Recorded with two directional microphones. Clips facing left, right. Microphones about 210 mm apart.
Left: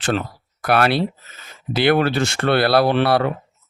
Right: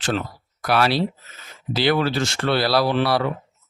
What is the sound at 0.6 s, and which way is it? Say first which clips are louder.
Speech: left 2 dB; 55° left (ahead or behind).